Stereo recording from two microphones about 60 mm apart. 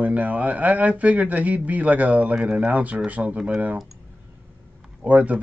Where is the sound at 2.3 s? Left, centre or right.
Centre.